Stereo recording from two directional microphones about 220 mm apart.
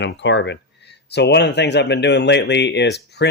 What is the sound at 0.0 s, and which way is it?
Speech, 55° left (ahead or behind).